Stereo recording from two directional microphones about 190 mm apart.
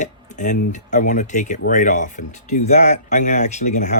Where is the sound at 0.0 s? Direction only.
40° left (ahead or behind).